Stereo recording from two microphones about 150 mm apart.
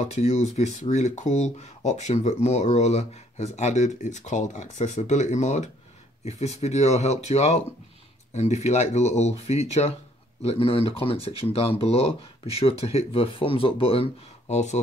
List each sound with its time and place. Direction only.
0.0 s speech: 45° left (ahead or behind)